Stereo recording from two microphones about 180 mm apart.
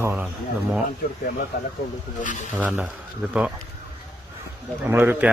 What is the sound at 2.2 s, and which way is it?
Speech, 45° left (ahead or behind).